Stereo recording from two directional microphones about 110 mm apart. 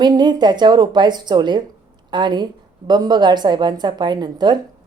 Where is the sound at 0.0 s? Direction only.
40° right (ahead or behind).